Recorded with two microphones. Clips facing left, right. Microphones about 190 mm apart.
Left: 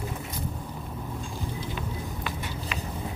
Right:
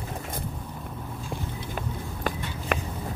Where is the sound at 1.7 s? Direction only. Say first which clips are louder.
Even; 50° right (ahead or behind).